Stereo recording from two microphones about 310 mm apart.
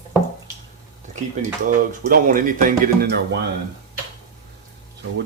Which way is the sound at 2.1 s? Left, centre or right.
Right.